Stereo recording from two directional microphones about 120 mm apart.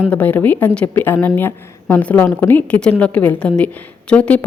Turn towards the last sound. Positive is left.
turn(degrees=10)  # may be behind; listen again after turning